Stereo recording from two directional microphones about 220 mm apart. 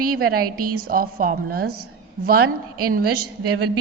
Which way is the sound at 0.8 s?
40° right (ahead or behind).